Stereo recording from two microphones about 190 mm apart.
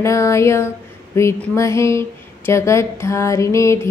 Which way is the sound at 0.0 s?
15° left (ahead or behind).